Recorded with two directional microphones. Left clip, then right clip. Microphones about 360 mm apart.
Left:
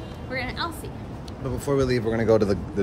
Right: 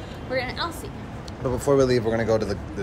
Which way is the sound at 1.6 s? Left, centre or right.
Centre.